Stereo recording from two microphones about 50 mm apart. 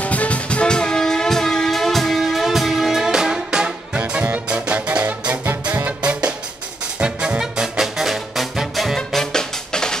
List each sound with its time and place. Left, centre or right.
0.0 s music: left; by 4.0 s centre
4.0 s music: right; by 9.9 s centre